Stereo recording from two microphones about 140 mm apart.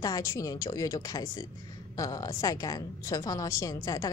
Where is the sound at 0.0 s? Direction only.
25° left (ahead or behind).